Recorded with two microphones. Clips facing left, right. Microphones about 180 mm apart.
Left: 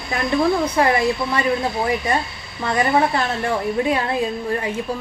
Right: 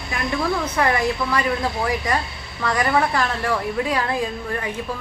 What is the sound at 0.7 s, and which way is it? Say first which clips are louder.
A woman's voice: left 3 dB; 25° left (ahead or behind).